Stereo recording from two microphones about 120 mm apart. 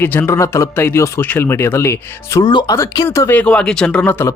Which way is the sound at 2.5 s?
40° left (ahead or behind).